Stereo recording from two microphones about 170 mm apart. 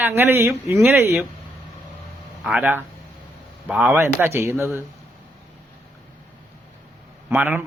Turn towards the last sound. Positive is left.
turn(degrees=-10)  # may be behind; listen again after turning